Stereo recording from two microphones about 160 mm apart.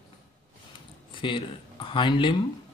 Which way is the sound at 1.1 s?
30° left (ahead or behind).